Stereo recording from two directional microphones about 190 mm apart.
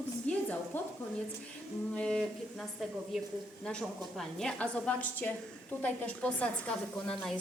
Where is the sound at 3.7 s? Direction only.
5° left (ahead or behind).